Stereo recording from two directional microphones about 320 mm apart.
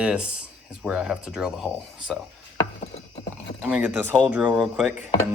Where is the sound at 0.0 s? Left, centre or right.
Centre.